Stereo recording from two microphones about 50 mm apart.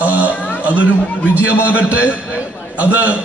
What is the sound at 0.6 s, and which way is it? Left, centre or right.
A man's voice, right.